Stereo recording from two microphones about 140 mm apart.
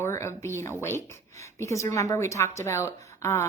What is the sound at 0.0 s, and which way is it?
Speech, 20° left (ahead or behind).